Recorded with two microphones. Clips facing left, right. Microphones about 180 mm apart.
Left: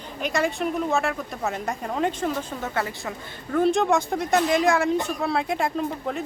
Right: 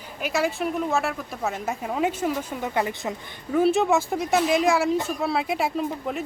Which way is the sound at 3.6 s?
5° right (ahead or behind).